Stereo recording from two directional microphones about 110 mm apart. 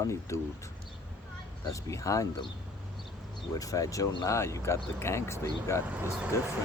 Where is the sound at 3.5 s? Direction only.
30° left (ahead or behind).